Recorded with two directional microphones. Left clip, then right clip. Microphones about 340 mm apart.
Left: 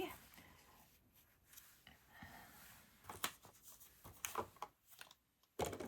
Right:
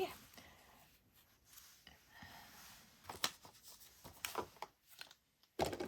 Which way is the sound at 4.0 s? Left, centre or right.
Right.